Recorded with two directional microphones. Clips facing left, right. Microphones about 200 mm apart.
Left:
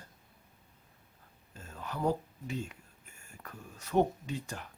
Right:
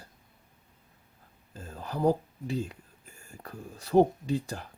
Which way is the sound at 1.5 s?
35° right (ahead or behind).